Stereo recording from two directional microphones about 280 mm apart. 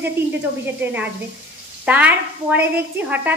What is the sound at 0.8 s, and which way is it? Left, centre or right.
A woman's voice, centre.